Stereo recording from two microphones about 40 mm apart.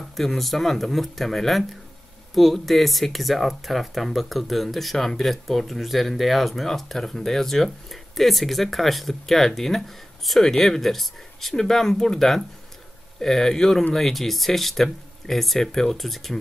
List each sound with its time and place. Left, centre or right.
0.1 s speech: centre